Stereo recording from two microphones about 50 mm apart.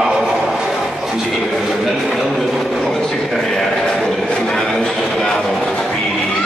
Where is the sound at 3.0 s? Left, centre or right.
Centre.